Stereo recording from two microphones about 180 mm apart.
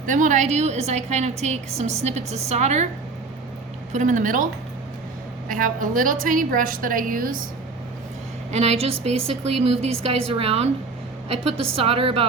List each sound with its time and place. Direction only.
0.0 s a woman's voice: 45° right (ahead or behind)
3.9 s a woman's voice: 45° right (ahead or behind)
5.5 s a woman's voice: 50° right (ahead or behind)
8.5 s a woman's voice: 35° right (ahead or behind)